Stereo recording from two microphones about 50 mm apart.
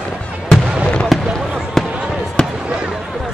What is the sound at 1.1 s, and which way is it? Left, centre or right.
Basketball bounce, centre.